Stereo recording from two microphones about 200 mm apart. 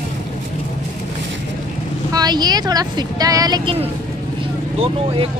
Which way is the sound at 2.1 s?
20° right (ahead or behind).